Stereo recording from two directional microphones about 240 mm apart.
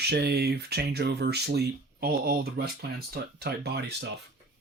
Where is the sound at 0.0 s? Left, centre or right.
Right.